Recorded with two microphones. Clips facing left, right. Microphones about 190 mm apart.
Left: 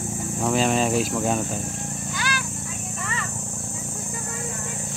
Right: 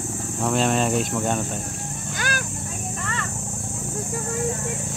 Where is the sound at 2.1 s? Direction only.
50° right (ahead or behind).